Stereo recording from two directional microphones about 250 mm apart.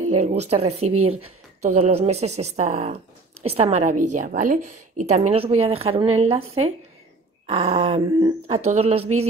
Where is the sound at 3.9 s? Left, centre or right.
Right.